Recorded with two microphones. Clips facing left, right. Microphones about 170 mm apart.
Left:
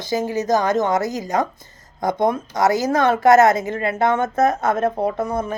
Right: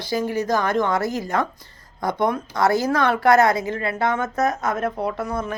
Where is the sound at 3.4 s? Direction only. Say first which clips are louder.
Left 3 dB; 45° left (ahead or behind).